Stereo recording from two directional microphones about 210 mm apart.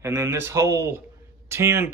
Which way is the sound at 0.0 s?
15° right (ahead or behind).